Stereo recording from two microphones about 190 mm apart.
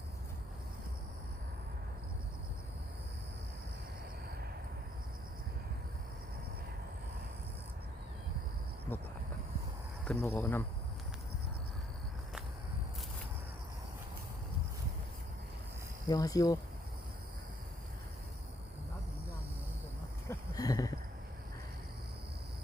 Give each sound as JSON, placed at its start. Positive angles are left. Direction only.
{"t": 10.0, "sound": "speech", "side_deg": 10}
{"t": 16.0, "sound": "speech", "side_deg": 20}
{"t": 20.2, "sound": "a sound", "side_deg": 20}